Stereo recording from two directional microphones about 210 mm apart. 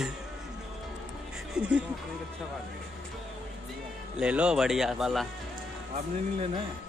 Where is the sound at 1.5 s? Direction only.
5° right (ahead or behind).